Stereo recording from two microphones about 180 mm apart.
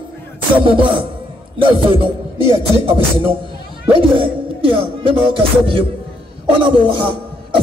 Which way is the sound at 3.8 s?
30° right (ahead or behind).